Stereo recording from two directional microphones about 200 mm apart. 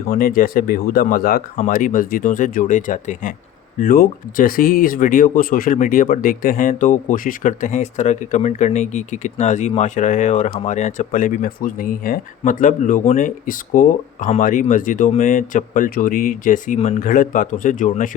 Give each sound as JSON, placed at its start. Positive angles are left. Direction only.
{"t": 0.1, "sound": "speech", "side_deg": 45}